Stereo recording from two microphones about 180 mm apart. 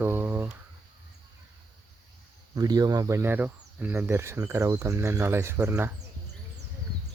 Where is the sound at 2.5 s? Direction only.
20° right (ahead or behind).